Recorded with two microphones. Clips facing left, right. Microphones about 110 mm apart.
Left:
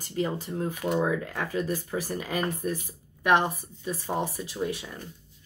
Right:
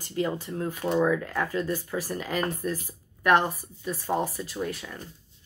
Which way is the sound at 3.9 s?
15° left (ahead or behind).